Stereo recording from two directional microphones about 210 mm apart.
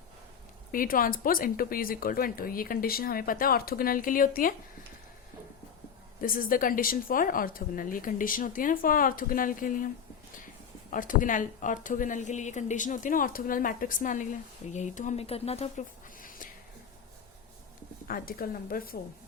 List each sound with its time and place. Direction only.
0.7 s speech: 40° left (ahead or behind)
6.2 s a woman's voice: 40° left (ahead or behind)
10.9 s a woman's voice: 40° left (ahead or behind)
16.2 s a sound: 40° left (ahead or behind)
18.1 s speech: 45° left (ahead or behind)